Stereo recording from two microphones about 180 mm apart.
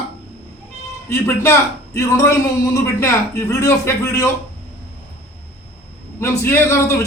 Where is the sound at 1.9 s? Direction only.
15° left (ahead or behind).